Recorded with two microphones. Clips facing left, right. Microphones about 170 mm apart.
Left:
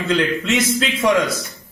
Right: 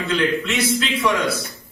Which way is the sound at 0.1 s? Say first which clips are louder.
Left 3 dB; 40° left (ahead or behind).